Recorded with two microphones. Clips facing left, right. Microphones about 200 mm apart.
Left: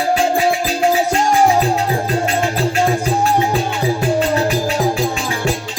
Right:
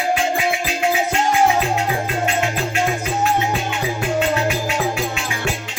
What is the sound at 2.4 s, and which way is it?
Music, 35° left (ahead or behind).